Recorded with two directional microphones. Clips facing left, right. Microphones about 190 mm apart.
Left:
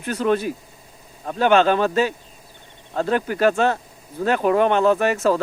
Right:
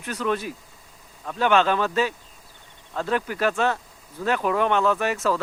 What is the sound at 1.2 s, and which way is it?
Speech, 35° left (ahead or behind).